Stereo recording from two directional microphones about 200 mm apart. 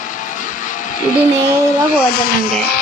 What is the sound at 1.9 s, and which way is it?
Speech, 45° left (ahead or behind).